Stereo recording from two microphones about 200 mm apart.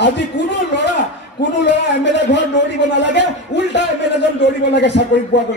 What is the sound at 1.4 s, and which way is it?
Speech, 60° left (ahead or behind).